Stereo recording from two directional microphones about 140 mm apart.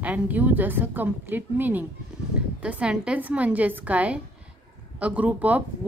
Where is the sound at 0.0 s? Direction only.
10° right (ahead or behind).